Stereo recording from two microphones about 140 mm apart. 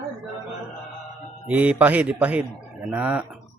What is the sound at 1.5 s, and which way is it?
Speech, 10° right (ahead or behind).